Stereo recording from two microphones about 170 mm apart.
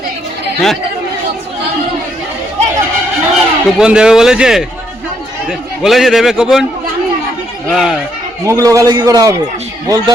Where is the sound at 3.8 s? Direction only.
5° right (ahead or behind).